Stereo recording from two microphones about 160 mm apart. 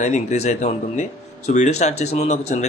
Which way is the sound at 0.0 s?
45° left (ahead or behind).